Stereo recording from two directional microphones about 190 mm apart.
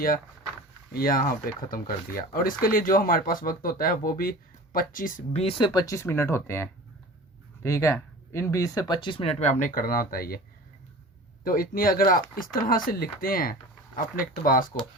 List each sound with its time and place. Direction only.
0.9 s speech: 50° left (ahead or behind)
11.4 s speech: 50° left (ahead or behind)